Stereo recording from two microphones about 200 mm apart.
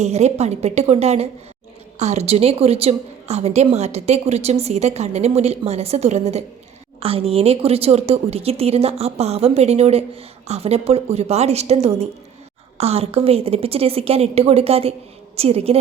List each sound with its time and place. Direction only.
0.0 s a woman's voice: 35° right (ahead or behind)